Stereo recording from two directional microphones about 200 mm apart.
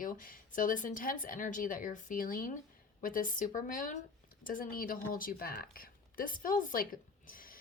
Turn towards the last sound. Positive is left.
turn(degrees=45)  # may be behind; listen again after turning